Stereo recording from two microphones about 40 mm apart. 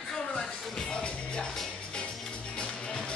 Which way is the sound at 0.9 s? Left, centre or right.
Left.